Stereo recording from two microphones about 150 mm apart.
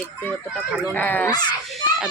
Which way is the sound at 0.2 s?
10° left (ahead or behind).